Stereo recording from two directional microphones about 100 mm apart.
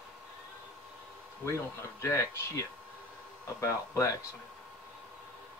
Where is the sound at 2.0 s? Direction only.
30° left (ahead or behind).